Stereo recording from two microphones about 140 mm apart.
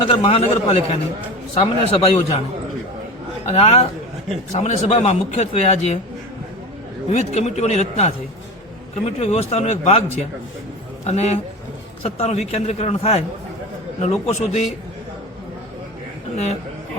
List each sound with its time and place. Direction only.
0.1 s a man's voice: 40° left (ahead or behind)
3.4 s a man's voice: 45° left (ahead or behind)
7.1 s a man's voice: 50° left (ahead or behind)
11.0 s a man's voice: 50° left (ahead or behind)